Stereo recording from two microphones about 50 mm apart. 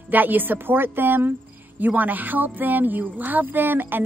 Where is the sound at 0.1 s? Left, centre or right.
Right.